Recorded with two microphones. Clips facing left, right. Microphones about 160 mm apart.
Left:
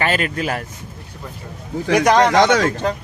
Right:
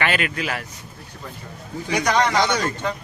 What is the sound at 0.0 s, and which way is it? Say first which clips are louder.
Speech: left 3 dB; 40° left (ahead or behind).